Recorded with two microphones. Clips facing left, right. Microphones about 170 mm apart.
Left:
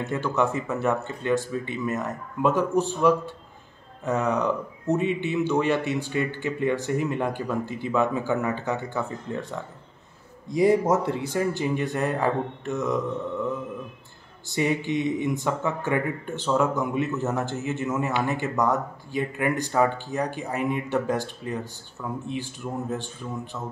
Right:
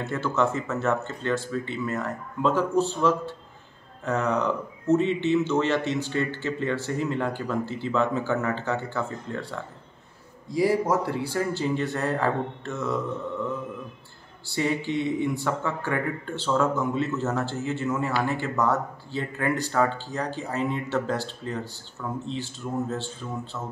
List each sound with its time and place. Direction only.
0.0 s speech: 15° left (ahead or behind)
14.5 s speech: 15° left (ahead or behind)